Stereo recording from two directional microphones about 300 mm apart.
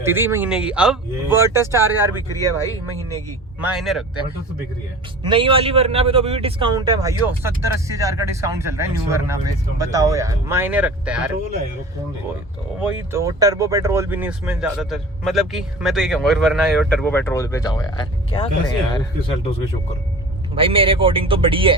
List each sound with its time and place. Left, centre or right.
0.0 s a man's voice: centre
3.6 s speech: centre
5.2 s a man's voice: centre
13.0 s speech: centre
20.6 s a man's voice: centre